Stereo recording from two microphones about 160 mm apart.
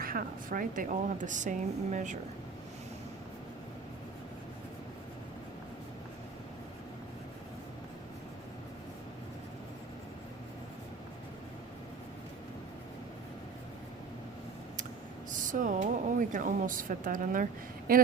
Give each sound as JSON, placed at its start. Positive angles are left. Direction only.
{"t": 0.0, "sound": "speech", "side_deg": -65}
{"t": 15.3, "sound": "speech", "side_deg": -55}